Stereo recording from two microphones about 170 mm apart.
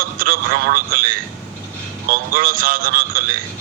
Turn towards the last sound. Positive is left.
turn(degrees=-55)  # may be behind; listen again after turning